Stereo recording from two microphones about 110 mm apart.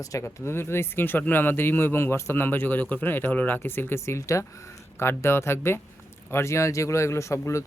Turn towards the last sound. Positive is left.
turn(degrees=25)  # may be behind; listen again after turning